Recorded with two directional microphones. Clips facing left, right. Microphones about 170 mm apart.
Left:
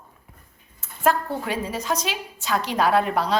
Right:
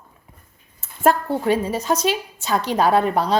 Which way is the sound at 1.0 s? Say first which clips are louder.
Right 4 dB; 30° right (ahead or behind).